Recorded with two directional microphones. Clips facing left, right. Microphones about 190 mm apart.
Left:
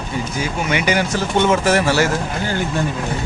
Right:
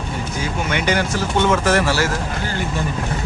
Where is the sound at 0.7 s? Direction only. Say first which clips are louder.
Left 1 dB; 10° left (ahead or behind).